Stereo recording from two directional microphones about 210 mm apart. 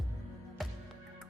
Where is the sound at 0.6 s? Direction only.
Centre (ahead or behind).